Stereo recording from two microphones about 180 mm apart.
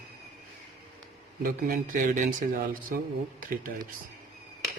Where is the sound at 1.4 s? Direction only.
45° right (ahead or behind).